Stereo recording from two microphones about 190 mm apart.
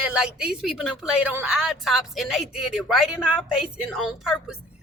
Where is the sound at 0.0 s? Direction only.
5° right (ahead or behind).